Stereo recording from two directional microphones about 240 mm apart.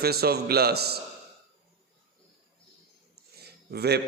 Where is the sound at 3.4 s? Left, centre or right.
Right.